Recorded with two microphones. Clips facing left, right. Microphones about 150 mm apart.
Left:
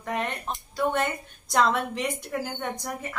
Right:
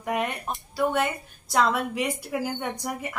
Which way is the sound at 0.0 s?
10° right (ahead or behind).